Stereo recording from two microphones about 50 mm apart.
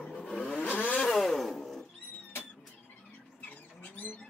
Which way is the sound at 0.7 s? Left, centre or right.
Left.